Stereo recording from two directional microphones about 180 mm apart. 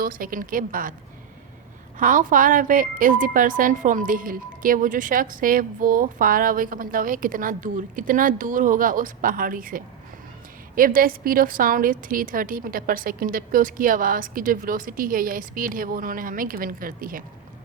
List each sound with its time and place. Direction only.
0.0 s speech: 50° right (ahead or behind)
2.0 s speech: 45° right (ahead or behind)